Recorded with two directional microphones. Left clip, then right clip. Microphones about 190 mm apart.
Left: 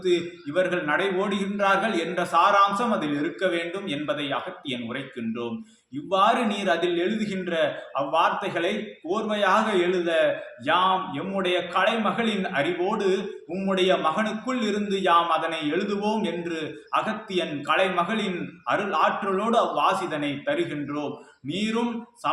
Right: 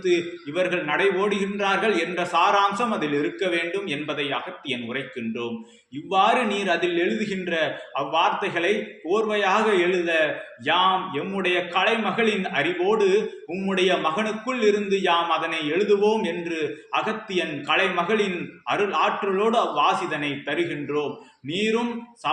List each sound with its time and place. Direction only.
0.0 s a man's voice: 25° left (ahead or behind)
6.1 s a man's voice: 20° left (ahead or behind)